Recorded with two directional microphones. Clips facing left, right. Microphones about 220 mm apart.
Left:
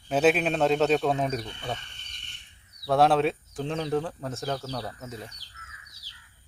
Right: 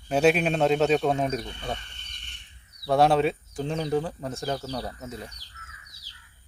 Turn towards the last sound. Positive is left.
turn(degrees=0)  # may be behind; listen again after turning